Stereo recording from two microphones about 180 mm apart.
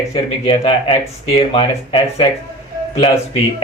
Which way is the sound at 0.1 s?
30° left (ahead or behind).